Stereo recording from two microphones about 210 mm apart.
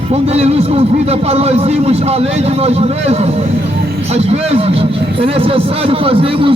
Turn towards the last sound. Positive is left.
turn(degrees=-25)  # may be behind; listen again after turning